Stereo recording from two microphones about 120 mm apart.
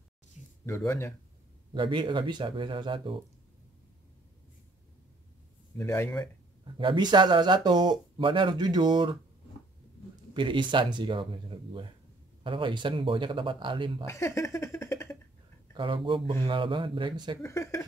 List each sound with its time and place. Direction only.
0.7 s speech: 20° left (ahead or behind)
1.7 s speech: 40° right (ahead or behind)
5.8 s speech: 20° left (ahead or behind)
6.6 s speech: 40° right (ahead or behind)
10.3 s speech: 40° right (ahead or behind)
14.0 s speech: 25° left (ahead or behind)
15.7 s speech: 45° right (ahead or behind)
17.4 s speech: 25° left (ahead or behind)